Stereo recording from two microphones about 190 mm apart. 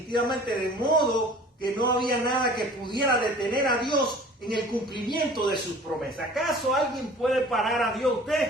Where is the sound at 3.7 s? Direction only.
25° left (ahead or behind).